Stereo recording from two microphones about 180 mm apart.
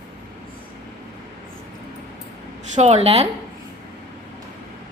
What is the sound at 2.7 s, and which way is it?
Speech, 40° right (ahead or behind).